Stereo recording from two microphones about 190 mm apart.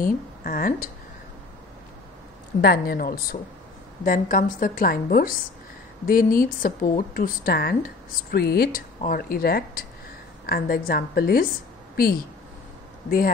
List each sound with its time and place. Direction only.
0.0 s a woman's voice: 45° left (ahead or behind)
2.6 s a woman's voice: 50° left (ahead or behind)